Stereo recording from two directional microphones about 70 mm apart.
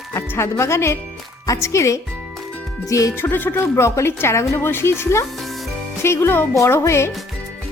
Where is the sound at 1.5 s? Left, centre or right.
Left.